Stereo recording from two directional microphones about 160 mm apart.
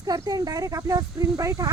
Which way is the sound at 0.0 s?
25° right (ahead or behind).